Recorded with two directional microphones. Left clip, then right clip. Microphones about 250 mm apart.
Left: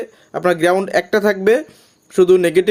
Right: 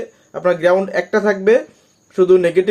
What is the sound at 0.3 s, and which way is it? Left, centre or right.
Speech, left.